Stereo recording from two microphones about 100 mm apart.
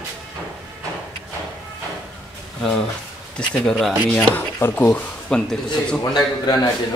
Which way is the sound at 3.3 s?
10° left (ahead or behind).